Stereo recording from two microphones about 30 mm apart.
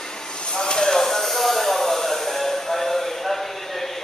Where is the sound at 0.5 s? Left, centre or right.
Left; by 3.9 s centre.